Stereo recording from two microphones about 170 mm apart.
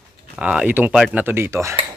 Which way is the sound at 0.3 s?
5° right (ahead or behind).